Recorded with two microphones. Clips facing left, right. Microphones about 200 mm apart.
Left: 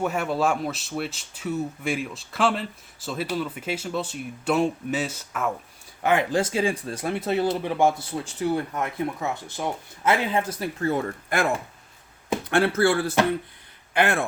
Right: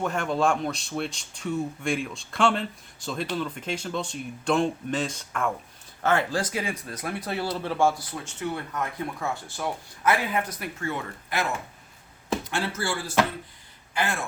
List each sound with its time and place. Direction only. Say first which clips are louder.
0.0 s speech: left 1 dB; 5° left (ahead or behind)
6.0 s speech: left 3 dB; 15° left (ahead or behind)
8.2 s speech: left 7 dB; 35° left (ahead or behind)
12.5 s speech: left 9 dB; 60° left (ahead or behind)